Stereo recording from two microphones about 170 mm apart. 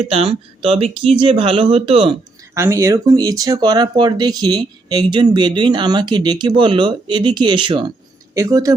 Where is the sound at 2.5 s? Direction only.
15° right (ahead or behind).